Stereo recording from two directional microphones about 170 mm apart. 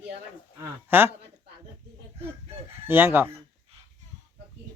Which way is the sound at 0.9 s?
10° right (ahead or behind).